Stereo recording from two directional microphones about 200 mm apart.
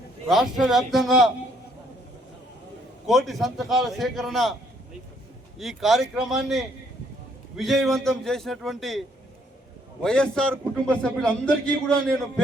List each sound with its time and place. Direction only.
0.3 s a man's voice: centre (ahead or behind)
3.1 s a man's voice: centre (ahead or behind)
5.5 s a man's voice: centre (ahead or behind)